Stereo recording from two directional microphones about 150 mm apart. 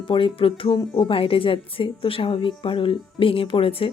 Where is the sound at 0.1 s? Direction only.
35° left (ahead or behind).